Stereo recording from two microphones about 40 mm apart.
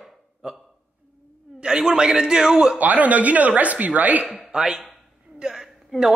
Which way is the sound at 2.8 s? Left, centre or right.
Right.